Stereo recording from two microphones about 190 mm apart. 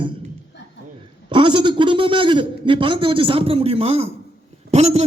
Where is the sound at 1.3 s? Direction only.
25° right (ahead or behind).